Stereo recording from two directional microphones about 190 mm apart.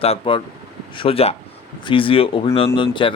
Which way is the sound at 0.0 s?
30° left (ahead or behind).